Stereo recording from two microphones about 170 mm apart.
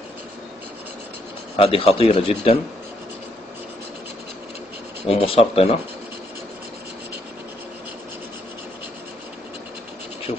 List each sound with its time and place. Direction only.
1.6 s a man's voice: 35° left (ahead or behind)
5.0 s a man's voice: 35° left (ahead or behind)